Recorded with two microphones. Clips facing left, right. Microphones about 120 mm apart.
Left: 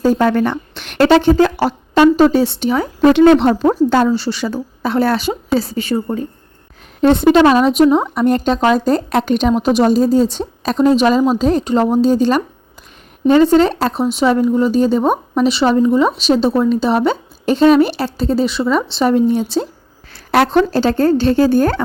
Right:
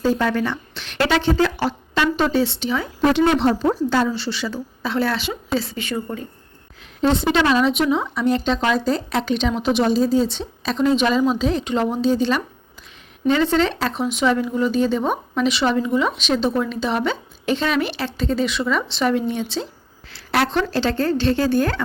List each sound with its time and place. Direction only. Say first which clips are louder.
0.0 s speech: left 6 dB; 45° left (ahead or behind)
3.0 s a woman's voice: left 8 dB; 60° left (ahead or behind); by 6.2 s 35° left (ahead or behind)
7.0 s a woman's voice: left 8 dB; 55° left (ahead or behind)